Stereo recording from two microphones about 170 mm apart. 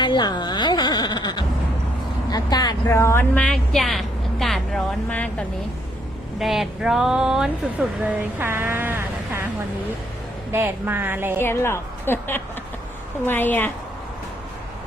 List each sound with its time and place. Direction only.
0.0 s a sound: 25° left (ahead or behind)
2.3 s speech: 25° left (ahead or behind); by 9.4 s 10° right (ahead or behind)
10.5 s a woman's voice: 15° right (ahead or behind)
11.3 s a woman's voice: 15° left (ahead or behind)